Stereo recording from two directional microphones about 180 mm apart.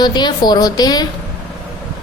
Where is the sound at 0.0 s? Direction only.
25° left (ahead or behind).